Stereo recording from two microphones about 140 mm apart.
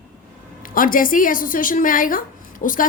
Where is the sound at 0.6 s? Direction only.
80° left.